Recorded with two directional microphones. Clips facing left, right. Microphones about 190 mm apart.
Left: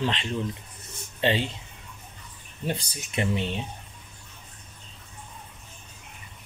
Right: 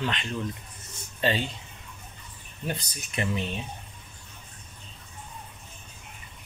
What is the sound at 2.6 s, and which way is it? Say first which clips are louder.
Speech: left 3 dB; 30° left (ahead or behind).